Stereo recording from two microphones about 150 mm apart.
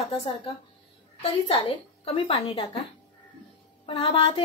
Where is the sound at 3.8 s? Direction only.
40° left (ahead or behind).